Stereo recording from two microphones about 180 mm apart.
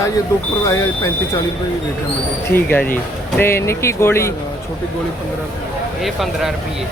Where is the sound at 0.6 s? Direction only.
15° left (ahead or behind).